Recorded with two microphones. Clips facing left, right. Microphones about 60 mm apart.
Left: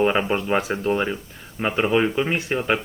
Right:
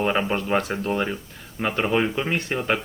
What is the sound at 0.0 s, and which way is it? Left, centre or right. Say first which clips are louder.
Speech: left 3 dB; centre.